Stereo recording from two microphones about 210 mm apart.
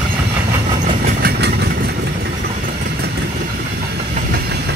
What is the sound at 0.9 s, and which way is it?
Train, 45° right (ahead or behind).